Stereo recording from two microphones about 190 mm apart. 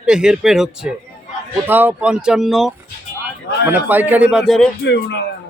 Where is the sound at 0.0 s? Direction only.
5° right (ahead or behind).